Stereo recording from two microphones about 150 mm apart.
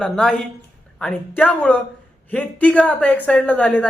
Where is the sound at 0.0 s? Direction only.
5° left (ahead or behind).